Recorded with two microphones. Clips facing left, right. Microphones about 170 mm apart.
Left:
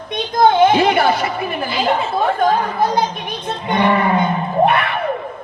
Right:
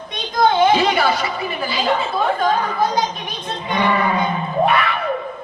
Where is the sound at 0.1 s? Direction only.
55° left (ahead or behind).